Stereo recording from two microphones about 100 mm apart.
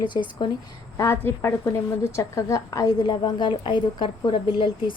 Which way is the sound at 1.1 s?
20° left (ahead or behind).